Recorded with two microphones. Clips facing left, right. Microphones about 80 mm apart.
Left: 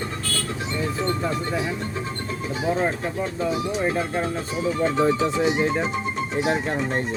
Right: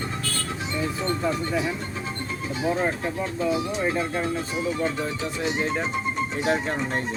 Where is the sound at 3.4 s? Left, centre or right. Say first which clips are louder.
Even; left.